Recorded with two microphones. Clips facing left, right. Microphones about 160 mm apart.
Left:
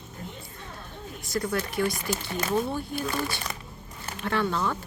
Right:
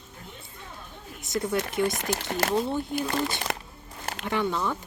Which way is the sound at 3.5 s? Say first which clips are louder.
Right 7 dB; 75° right (ahead or behind).